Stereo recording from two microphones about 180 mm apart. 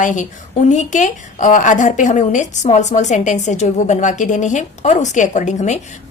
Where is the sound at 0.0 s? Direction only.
45° left (ahead or behind).